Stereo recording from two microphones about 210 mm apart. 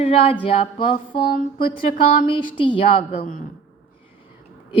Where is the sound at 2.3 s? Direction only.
25° left (ahead or behind).